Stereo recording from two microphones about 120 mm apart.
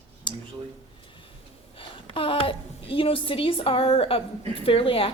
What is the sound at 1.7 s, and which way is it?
A woman's voice, 50° left (ahead or behind).